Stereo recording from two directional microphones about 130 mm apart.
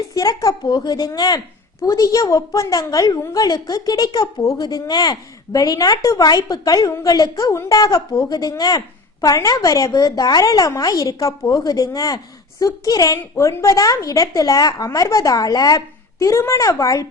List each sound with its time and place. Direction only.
0.1 s a woman's voice: 25° left (ahead or behind)